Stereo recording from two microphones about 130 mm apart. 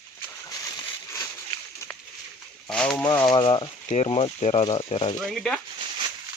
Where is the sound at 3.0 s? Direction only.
15° left (ahead or behind).